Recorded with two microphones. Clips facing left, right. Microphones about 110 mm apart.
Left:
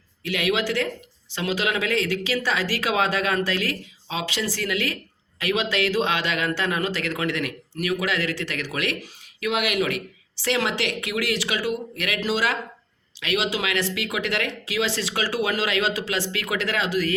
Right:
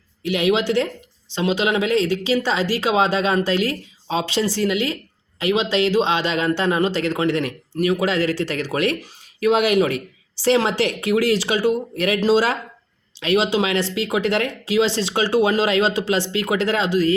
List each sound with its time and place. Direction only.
0.2 s speech: 25° right (ahead or behind)